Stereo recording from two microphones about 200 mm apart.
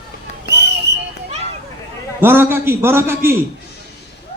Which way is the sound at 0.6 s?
60° right (ahead or behind).